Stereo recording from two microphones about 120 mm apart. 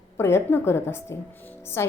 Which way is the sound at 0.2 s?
20° left (ahead or behind).